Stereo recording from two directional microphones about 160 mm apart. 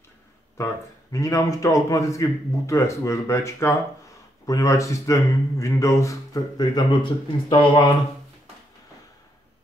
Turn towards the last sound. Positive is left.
turn(degrees=30)  # may be behind; listen again after turning